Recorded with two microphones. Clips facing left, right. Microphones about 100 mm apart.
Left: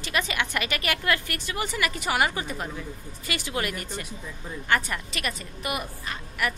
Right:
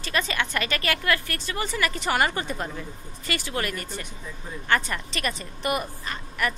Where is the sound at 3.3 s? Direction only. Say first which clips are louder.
Right 1 dB; 15° left (ahead or behind).